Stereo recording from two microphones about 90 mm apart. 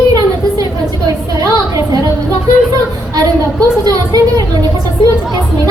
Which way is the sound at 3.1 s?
45° right (ahead or behind).